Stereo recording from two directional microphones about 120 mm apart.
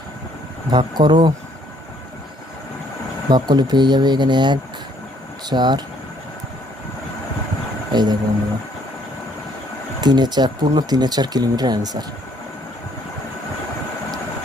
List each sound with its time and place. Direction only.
0.7 s speech: 40° right (ahead or behind)
3.2 s speech: 40° right (ahead or behind)
7.9 s speech: 40° right (ahead or behind)
10.0 s speech: 35° right (ahead or behind)